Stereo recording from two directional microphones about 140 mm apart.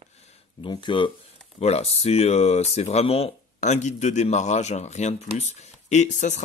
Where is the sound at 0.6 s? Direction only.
35° left (ahead or behind).